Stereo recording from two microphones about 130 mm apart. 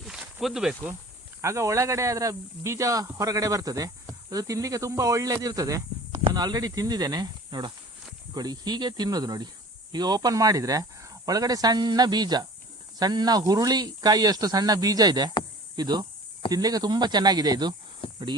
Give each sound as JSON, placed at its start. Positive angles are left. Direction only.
{"t": 0.0, "sound": "snake", "side_deg": -5}
{"t": 1.4, "sound": "speech", "side_deg": -20}
{"t": 18.0, "sound": "a sound", "side_deg": 45}